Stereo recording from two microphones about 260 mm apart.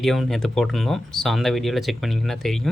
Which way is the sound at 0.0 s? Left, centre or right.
Centre.